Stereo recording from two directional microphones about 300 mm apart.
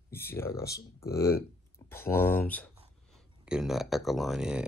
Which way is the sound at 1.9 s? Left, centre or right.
Centre.